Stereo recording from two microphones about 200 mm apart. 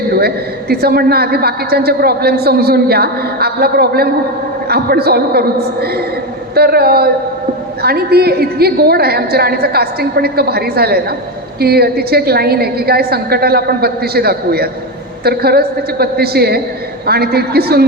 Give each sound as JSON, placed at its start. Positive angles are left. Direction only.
{"t": 0.2, "sound": "a man's voice", "side_deg": -50}